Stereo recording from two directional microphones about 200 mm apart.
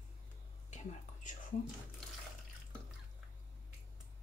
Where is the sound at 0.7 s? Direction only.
40° left (ahead or behind).